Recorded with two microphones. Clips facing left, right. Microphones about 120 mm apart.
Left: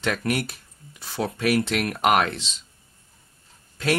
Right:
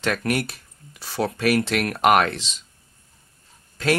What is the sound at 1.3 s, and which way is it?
Speech, 75° right (ahead or behind).